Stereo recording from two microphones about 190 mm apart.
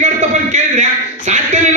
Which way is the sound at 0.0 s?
40° right (ahead or behind).